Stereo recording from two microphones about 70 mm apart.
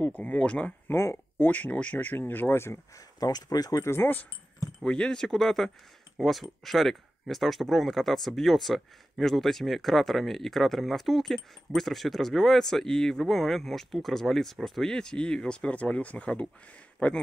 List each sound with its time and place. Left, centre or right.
0.0 s speech: left
0.9 s speech: left
3.2 s speech: left
3.8 s speech: left
4.8 s speech: centre